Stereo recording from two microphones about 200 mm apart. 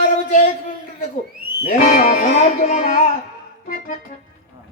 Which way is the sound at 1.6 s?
45° left (ahead or behind).